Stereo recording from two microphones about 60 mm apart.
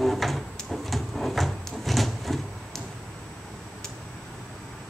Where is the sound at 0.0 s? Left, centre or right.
Centre.